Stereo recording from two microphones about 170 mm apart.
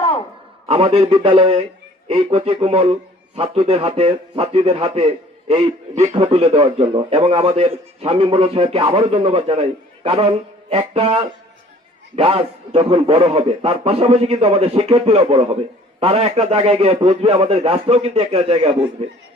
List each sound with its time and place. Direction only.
0.7 s a man's voice: 35° right (ahead or behind)